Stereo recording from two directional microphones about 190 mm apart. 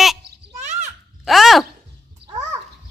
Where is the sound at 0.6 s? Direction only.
35° right (ahead or behind).